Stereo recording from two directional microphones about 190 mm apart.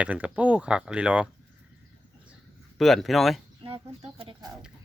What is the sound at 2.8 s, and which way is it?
Speech, centre (ahead or behind).